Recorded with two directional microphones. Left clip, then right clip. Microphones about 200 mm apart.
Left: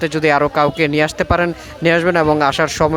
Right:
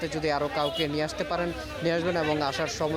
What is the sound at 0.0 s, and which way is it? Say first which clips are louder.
A man's voice: left 13 dB; 30° left (ahead or behind).